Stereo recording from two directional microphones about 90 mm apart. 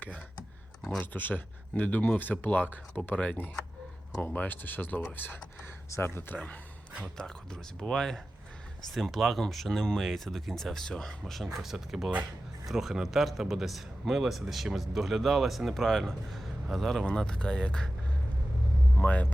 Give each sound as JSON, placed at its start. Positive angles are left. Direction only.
{"t": 0.9, "sound": "a man's voice", "side_deg": 20}
{"t": 18.9, "sound": "speech", "side_deg": 20}